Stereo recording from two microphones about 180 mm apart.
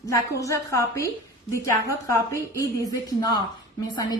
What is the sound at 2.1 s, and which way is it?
A woman's voice, 15° left (ahead or behind).